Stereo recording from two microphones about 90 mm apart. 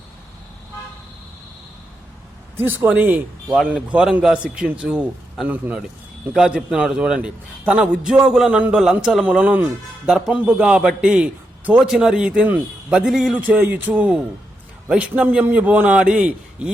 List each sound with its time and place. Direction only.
2.6 s a man's voice: 20° right (ahead or behind)
6.3 s a man's voice: 5° right (ahead or behind)
13.1 s a man's voice: centre (ahead or behind)
13.3 s a man's voice: 20° right (ahead or behind)